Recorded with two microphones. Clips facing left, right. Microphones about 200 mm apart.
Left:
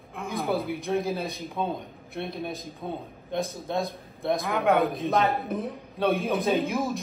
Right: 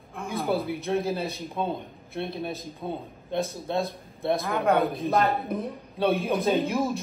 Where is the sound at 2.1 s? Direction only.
Centre (ahead or behind).